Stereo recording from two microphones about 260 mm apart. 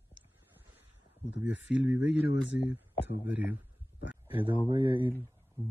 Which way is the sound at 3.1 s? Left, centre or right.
Centre.